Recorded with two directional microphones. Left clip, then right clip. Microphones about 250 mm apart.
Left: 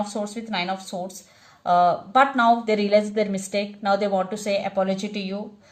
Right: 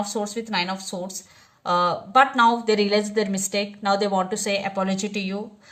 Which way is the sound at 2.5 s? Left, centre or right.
Right.